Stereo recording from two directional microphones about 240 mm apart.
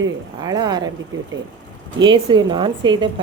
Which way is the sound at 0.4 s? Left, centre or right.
Centre.